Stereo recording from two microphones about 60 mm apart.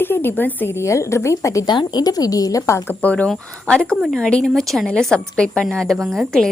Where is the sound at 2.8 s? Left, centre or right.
Left; by 4.9 s centre.